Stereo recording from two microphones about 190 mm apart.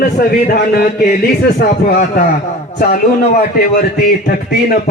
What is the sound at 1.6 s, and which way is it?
Speech, 55° left (ahead or behind).